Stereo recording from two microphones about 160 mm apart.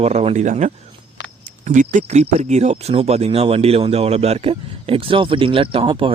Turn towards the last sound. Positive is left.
turn(degrees=-30)  # may be behind; listen again after turning